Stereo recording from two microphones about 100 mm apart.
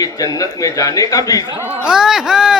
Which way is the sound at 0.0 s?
35° left (ahead or behind).